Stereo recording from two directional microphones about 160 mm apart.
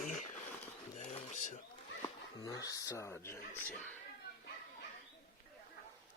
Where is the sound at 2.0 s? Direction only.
20° left (ahead or behind).